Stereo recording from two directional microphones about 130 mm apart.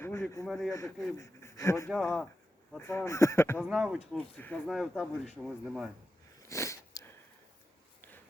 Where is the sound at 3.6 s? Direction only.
5° right (ahead or behind).